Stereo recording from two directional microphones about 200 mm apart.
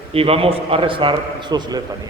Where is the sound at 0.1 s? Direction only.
30° right (ahead or behind).